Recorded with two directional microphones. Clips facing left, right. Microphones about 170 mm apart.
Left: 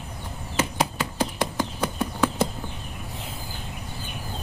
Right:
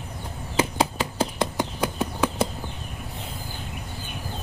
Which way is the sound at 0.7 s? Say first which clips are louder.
Right 2 dB; 25° right (ahead or behind).